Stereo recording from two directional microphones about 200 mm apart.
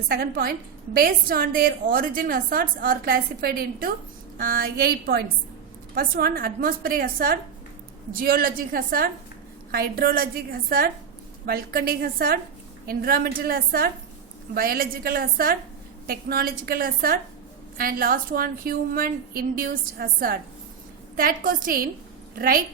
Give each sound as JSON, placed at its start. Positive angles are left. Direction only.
{"t": 0.1, "sound": "a woman's voice", "side_deg": -50}